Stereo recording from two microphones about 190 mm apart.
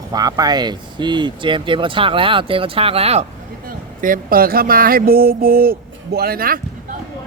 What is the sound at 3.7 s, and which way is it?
Speech, 45° right (ahead or behind).